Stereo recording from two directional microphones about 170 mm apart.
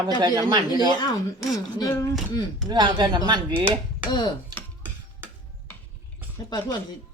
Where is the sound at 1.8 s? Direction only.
20° left (ahead or behind).